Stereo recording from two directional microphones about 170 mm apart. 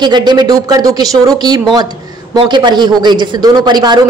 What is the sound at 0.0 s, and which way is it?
A man's voice, 25° right (ahead or behind).